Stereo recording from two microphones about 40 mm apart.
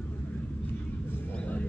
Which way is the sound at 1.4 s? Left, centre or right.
Left.